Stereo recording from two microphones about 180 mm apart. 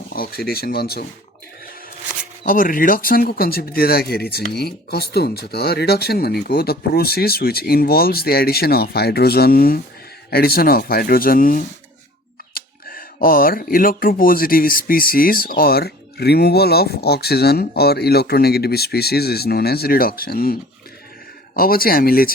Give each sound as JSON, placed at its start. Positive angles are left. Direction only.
{"t": 0.1, "sound": "speech", "side_deg": 55}
{"t": 2.4, "sound": "speech", "side_deg": 50}